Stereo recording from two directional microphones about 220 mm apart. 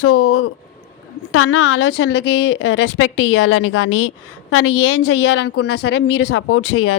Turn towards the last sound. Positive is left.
turn(degrees=80)